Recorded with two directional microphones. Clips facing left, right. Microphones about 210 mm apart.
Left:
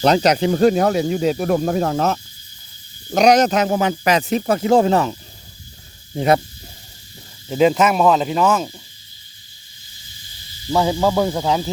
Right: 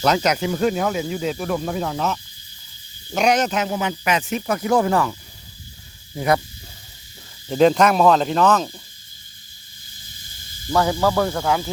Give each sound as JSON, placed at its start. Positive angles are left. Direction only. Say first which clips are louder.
{"t": 0.0, "sound": "speech", "louder": "left 4 dB", "side_deg": 35}
{"t": 6.1, "sound": "speech", "louder": "left 4 dB", "side_deg": 25}
{"t": 7.4, "sound": "speech", "louder": "even", "side_deg": 5}
{"t": 10.7, "sound": "speech", "louder": "left 2 dB", "side_deg": 15}